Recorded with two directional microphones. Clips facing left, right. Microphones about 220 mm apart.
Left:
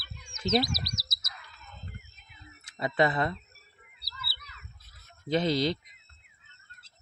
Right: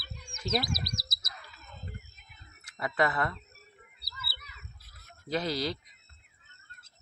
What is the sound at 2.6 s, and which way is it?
Speech, 25° left (ahead or behind).